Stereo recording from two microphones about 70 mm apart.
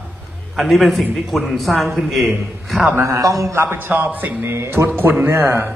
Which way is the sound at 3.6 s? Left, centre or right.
Right.